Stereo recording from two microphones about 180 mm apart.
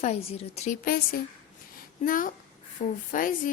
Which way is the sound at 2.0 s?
50° left (ahead or behind).